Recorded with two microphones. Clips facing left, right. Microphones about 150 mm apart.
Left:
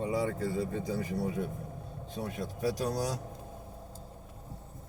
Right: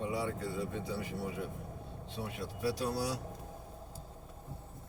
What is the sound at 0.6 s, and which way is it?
Speech, 40° left (ahead or behind).